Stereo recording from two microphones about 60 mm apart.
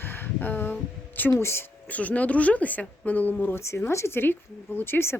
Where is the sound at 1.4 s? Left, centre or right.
Left.